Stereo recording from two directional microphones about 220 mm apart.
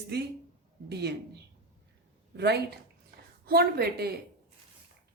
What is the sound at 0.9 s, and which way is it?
A woman's voice, 50° right (ahead or behind).